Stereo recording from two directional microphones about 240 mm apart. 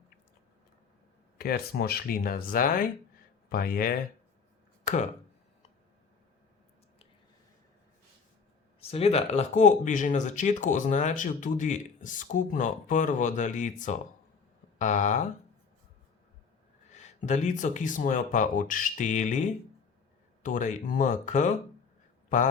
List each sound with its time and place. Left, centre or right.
1.4 s speech: left
8.8 s speech: left
16.9 s speech: left
20.4 s a man's voice: left